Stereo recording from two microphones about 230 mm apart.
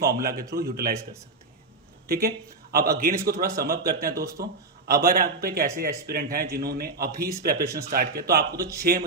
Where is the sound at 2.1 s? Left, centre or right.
Right.